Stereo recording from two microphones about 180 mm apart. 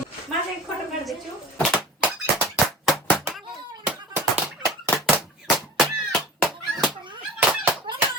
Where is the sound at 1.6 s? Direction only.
5° right (ahead or behind).